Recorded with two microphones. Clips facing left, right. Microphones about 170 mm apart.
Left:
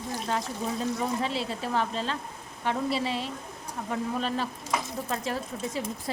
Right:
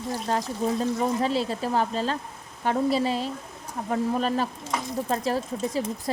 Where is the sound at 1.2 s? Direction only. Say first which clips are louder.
Right 5 dB; 40° right (ahead or behind).